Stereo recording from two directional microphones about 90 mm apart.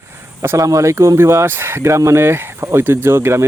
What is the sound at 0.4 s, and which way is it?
Speech, 35° right (ahead or behind).